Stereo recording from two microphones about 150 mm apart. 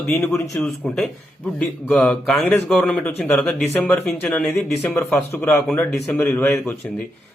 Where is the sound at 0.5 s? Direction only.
Centre (ahead or behind).